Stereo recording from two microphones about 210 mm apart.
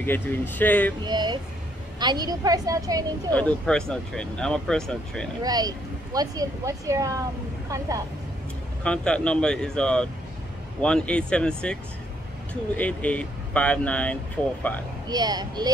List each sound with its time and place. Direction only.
0.0 s speech: 10° left (ahead or behind)
1.0 s a child's voice: 20° right (ahead or behind)
3.3 s speech: 5° left (ahead or behind)
5.4 s speech: 20° right (ahead or behind)
8.8 s speech: 5° left (ahead or behind)
15.0 s a child's voice: 20° right (ahead or behind)